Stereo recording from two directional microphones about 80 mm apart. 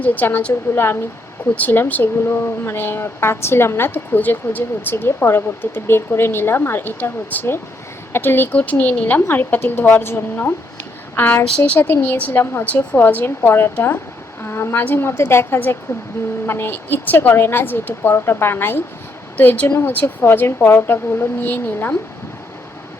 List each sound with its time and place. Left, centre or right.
0.0 s speech: left
1.5 s a woman's voice: left